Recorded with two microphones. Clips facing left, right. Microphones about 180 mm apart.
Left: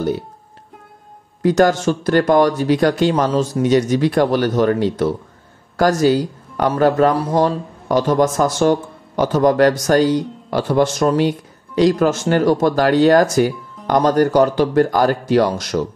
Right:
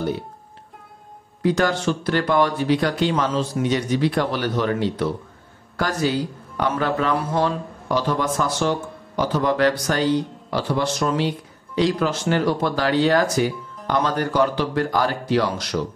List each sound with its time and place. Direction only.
1.4 s speech: 45° left (ahead or behind)